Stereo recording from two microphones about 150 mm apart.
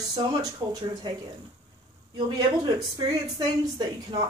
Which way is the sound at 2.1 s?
30° right (ahead or behind).